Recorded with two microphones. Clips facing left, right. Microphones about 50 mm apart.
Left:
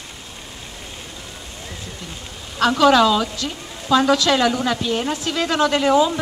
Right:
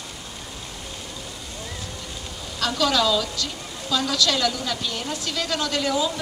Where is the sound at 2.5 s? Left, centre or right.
Left.